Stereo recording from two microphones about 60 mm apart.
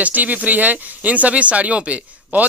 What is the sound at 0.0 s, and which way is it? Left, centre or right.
Speech, right.